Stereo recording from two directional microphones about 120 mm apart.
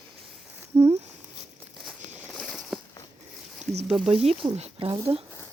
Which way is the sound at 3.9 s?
5° right (ahead or behind).